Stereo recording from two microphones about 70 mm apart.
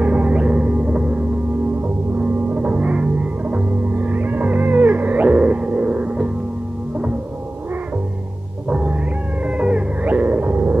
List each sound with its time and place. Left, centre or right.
0.0 s music: centre
2.5 s music: right
8.6 s cat: centre
9.6 s music: centre